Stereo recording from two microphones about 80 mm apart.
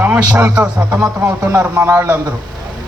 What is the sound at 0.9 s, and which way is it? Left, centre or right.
Speech, right.